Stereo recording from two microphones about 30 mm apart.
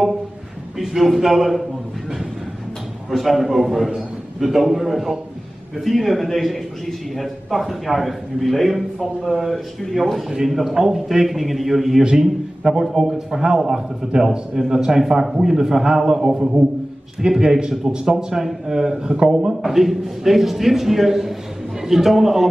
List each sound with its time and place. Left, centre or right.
0.7 s a man's voice: centre
3.1 s a man's voice: centre
12.0 s a man's voice: right
12.8 s a man's voice: centre
16.3 s a man's voice: right
19.6 s a man's voice: centre